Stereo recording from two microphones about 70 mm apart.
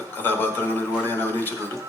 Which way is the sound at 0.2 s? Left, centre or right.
Left.